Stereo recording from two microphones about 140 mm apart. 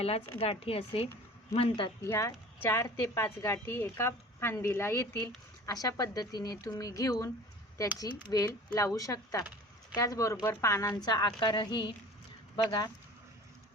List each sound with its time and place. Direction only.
0.3 s a woman's voice: 45° left (ahead or behind)
2.0 s a woman's voice: 20° left (ahead or behind)
5.7 s a woman's voice: 25° left (ahead or behind)